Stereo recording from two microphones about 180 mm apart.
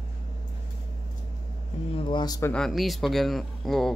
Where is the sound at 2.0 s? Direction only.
25° left (ahead or behind).